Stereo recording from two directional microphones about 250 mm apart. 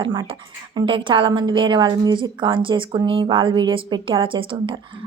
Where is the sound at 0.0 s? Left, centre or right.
Centre.